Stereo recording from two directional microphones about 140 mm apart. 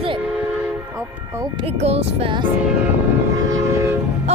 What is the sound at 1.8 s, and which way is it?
Speech, 45° right (ahead or behind).